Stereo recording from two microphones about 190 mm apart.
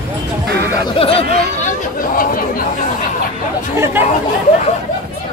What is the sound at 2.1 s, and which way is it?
Speech, 50° left (ahead or behind).